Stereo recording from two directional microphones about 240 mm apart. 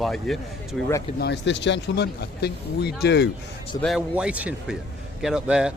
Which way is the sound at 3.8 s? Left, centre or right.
Centre.